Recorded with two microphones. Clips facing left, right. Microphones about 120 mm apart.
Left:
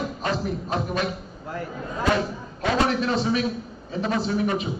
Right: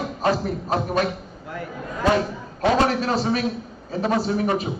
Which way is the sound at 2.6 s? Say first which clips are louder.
Right 3 dB; 40° right (ahead or behind).